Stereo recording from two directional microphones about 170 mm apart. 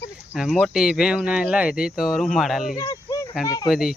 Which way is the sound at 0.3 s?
Centre (ahead or behind).